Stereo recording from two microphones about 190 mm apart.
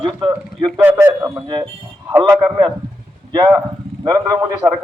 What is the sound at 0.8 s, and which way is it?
A man's voice, 10° right (ahead or behind).